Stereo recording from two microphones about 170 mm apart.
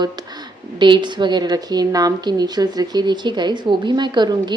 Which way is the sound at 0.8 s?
25° right (ahead or behind).